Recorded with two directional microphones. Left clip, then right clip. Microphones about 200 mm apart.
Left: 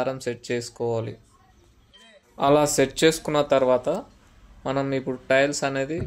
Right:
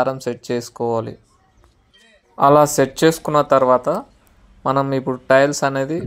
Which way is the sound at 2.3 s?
20° right (ahead or behind).